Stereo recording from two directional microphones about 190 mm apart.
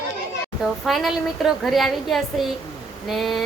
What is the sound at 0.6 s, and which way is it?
A woman's voice, centre (ahead or behind).